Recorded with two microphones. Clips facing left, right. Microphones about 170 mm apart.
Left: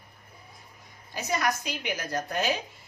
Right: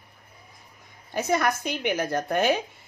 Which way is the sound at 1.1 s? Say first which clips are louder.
Right 5 dB; 55° right (ahead or behind).